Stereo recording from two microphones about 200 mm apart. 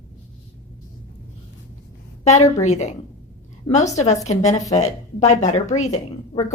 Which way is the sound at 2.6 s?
35° left (ahead or behind).